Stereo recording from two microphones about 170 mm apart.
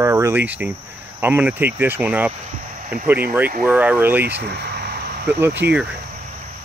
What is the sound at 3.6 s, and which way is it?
Speech, 10° right (ahead or behind).